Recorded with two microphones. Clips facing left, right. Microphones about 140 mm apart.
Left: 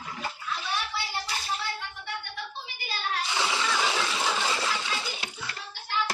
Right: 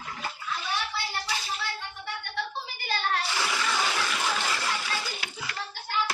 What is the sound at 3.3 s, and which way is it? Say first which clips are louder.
Water: left 1 dB; 20° left (ahead or behind).